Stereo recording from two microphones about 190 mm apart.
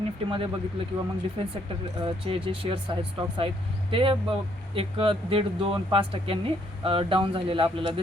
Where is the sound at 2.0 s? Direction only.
30° right (ahead or behind).